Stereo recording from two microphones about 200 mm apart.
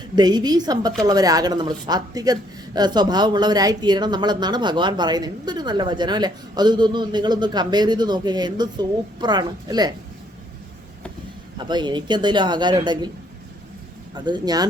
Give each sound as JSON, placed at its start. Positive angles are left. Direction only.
{"t": 0.2, "sound": "a woman's voice", "side_deg": -20}
{"t": 11.5, "sound": "a woman's voice", "side_deg": -20}
{"t": 14.3, "sound": "a woman's voice", "side_deg": -20}